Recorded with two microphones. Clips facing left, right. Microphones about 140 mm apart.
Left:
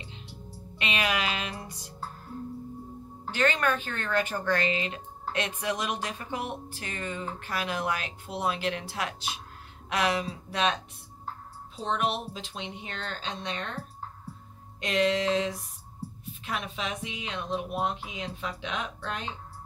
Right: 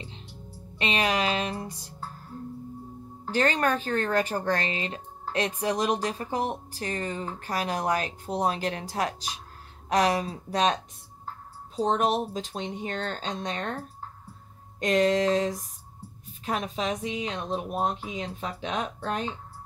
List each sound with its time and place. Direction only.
0.7 s speech: 35° right (ahead or behind)
3.3 s speech: 35° right (ahead or behind)
14.8 s speech: 45° right (ahead or behind)